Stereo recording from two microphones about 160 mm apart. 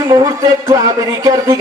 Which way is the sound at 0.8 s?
25° right (ahead or behind).